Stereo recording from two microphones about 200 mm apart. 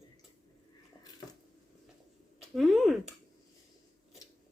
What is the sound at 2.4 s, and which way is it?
Speech, centre (ahead or behind).